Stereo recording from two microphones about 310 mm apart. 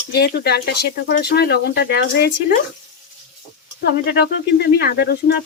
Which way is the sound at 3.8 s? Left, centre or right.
Left.